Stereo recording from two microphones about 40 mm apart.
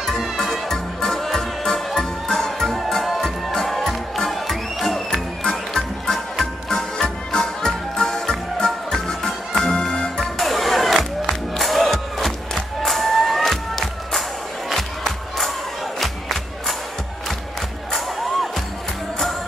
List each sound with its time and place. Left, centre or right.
0.4 s music: centre
5.1 s music: centre
10.2 s music: centre
11.5 s crowd: centre